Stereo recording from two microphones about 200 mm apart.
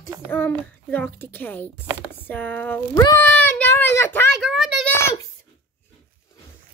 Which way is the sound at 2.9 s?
15° left (ahead or behind).